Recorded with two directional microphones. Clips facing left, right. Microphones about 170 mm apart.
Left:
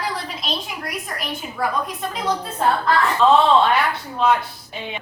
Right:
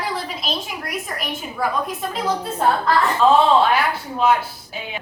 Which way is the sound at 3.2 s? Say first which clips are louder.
Even; 5° right (ahead or behind).